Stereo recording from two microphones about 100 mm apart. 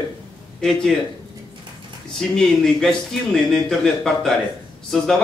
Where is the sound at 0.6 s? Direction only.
5° left (ahead or behind).